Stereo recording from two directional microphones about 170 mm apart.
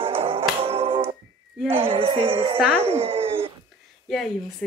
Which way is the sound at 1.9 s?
30° right (ahead or behind).